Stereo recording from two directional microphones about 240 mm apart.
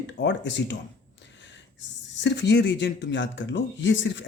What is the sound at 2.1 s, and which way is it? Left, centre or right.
Speech, left.